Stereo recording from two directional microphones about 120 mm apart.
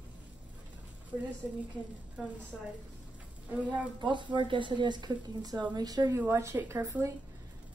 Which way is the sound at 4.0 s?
40° right (ahead or behind).